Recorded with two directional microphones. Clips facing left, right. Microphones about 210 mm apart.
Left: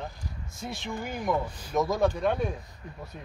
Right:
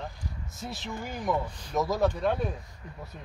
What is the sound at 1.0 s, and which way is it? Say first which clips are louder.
Speech: left 1 dB; centre (ahead or behind).